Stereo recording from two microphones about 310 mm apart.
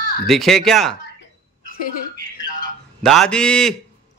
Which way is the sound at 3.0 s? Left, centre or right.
Centre.